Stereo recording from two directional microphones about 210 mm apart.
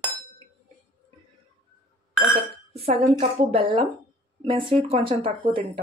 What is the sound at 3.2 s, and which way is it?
Speech, 30° right (ahead or behind).